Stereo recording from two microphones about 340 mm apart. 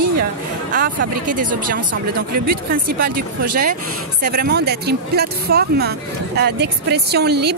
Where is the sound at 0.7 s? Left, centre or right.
Right.